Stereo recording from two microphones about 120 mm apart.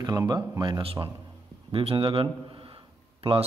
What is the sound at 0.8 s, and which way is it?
A man's voice, 50° right (ahead or behind).